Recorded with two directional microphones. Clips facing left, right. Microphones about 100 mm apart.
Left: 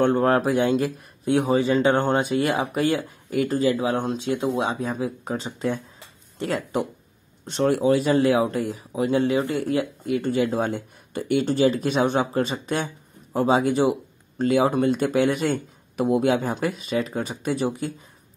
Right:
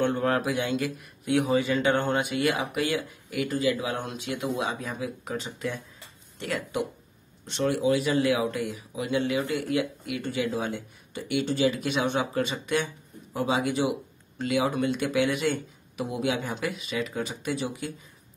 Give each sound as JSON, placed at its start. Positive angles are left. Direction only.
{"t": 0.0, "sound": "speech", "side_deg": 40}